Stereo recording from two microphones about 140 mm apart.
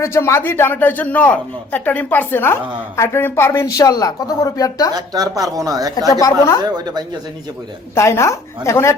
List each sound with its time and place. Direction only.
0.0 s speech: 20° left (ahead or behind)
4.9 s speech: 25° right (ahead or behind)
6.1 s speech: 25° left (ahead or behind)
6.6 s speech: 30° right (ahead or behind)
7.9 s speech: 20° left (ahead or behind)